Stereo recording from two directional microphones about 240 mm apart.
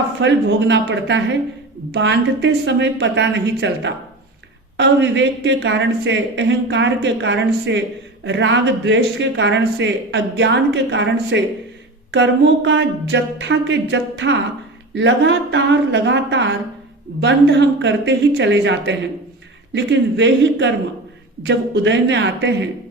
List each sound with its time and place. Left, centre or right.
0.2 s speech: right